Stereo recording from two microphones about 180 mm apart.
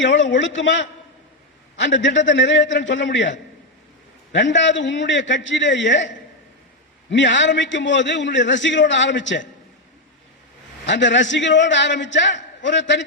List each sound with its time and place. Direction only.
0.0 s a man's voice: 90° left
7.1 s a man's voice: 90° left
10.8 s a man's voice: 90° left